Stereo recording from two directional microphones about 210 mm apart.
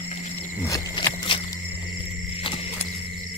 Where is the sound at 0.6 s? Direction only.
15° left (ahead or behind).